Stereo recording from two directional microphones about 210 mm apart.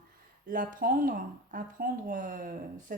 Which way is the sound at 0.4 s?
40° right (ahead or behind).